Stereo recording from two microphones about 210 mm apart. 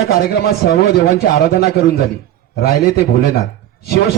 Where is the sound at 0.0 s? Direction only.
45° left (ahead or behind).